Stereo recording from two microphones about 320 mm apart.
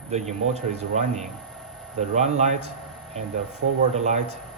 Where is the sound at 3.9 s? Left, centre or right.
Right.